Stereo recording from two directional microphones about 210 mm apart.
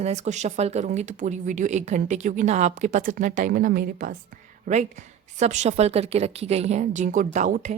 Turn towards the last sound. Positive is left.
turn(degrees=-35)  # may be behind; listen again after turning